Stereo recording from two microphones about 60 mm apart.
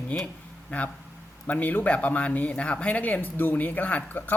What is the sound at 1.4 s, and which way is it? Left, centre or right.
Speech, left.